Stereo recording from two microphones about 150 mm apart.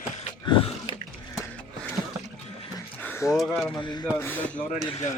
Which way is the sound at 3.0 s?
15° left (ahead or behind).